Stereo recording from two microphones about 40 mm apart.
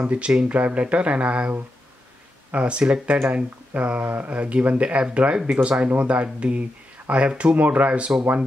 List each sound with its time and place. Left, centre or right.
0.1 s speech: right
0.6 s speech: right
2.5 s speech: right
4.0 s speech: right
7.5 s speech: right